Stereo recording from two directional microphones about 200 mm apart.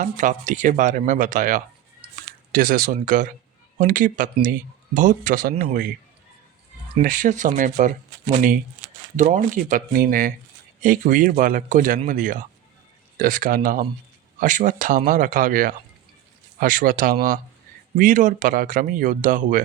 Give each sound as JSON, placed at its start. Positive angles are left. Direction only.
{"t": 0.0, "sound": "speech", "side_deg": -40}
{"t": 7.0, "sound": "speech", "side_deg": -40}